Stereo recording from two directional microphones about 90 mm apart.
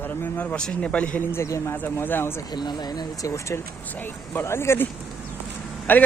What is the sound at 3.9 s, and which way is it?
Speech, 20° left (ahead or behind).